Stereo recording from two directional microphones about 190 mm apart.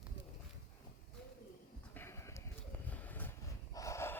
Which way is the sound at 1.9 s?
10° left (ahead or behind).